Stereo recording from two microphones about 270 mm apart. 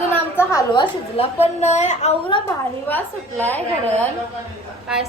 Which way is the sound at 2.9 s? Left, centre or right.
Centre.